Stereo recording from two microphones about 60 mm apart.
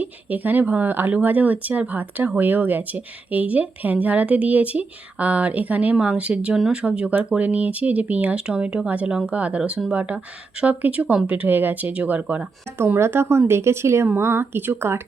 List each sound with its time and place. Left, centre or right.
0.0 s speech: right
13.0 s speech: right